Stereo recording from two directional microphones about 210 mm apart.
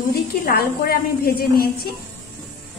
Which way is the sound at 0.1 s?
45° left (ahead or behind).